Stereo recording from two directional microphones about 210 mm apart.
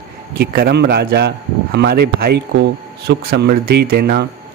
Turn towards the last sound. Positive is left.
turn(degrees=-50)  # may be behind; listen again after turning